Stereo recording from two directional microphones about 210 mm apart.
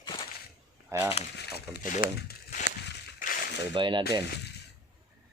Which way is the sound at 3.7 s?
20° right (ahead or behind).